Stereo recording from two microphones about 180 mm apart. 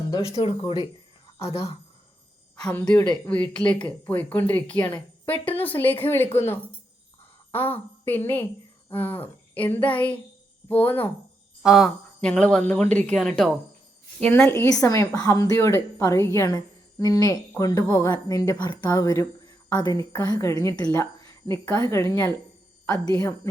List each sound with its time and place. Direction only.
0.3 s a woman's voice: 30° left (ahead or behind)
2.6 s speech: 5° left (ahead or behind)
11.6 s a woman's voice: centre (ahead or behind); by 23.3 s 20° left (ahead or behind)